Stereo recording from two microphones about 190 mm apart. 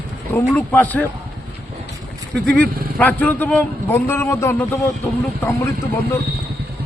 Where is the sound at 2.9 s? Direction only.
10° left (ahead or behind).